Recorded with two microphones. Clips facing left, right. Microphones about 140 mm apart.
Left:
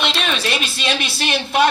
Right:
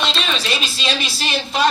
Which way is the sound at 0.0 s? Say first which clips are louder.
Left 1 dB; 60° left (ahead or behind).